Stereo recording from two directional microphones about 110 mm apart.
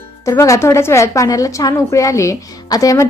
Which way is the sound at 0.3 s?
30° left (ahead or behind).